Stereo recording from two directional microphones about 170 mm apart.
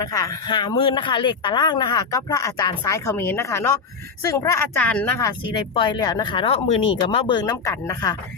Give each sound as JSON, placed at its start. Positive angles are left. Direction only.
{"t": 0.0, "sound": "speech", "side_deg": 20}
{"t": 5.7, "sound": "speech", "side_deg": 30}